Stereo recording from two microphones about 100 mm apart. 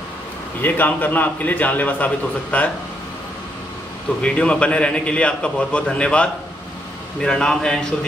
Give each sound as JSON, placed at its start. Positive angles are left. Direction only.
{"t": 0.6, "sound": "a man's voice", "side_deg": 20}
{"t": 4.2, "sound": "a man's voice", "side_deg": 10}